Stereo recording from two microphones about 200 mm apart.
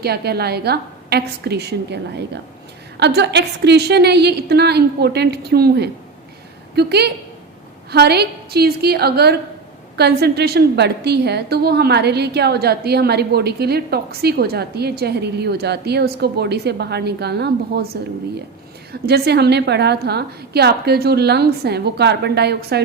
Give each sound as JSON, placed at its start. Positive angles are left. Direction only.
{"t": 0.0, "sound": "a woman's voice", "side_deg": -55}
{"t": 19.0, "sound": "a woman's voice", "side_deg": -55}